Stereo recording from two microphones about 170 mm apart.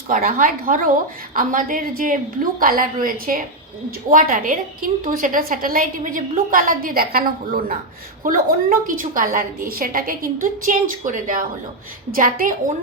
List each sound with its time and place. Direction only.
0.1 s a woman's voice: 55° right (ahead or behind)